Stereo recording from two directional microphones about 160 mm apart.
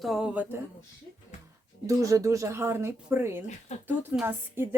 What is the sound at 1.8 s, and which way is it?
Speech, 20° right (ahead or behind).